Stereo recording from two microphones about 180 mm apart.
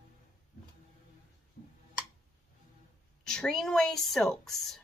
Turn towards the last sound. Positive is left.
turn(degrees=0)  # may be behind; listen again after turning